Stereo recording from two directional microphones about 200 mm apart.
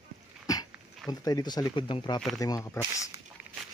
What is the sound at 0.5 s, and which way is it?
Dog, 20° left (ahead or behind).